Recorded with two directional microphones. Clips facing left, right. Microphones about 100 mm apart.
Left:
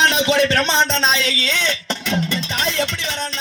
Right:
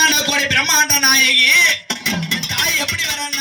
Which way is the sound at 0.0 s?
45° left (ahead or behind).